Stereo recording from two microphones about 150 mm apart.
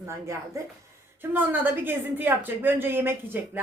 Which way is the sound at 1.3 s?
15° right (ahead or behind).